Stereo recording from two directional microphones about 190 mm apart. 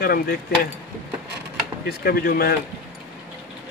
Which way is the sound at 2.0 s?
55° left (ahead or behind).